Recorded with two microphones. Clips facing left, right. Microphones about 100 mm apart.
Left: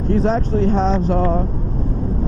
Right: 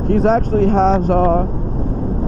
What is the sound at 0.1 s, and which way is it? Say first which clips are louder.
Speech: right 4 dB; 50° right (ahead or behind).